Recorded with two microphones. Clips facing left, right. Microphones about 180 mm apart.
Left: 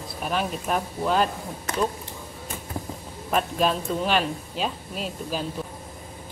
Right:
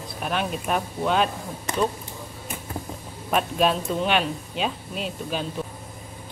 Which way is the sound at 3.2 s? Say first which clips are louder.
Right 1 dB; 5° right (ahead or behind).